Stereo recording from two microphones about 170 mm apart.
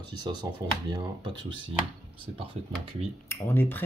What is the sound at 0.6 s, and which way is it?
Speech, 25° right (ahead or behind).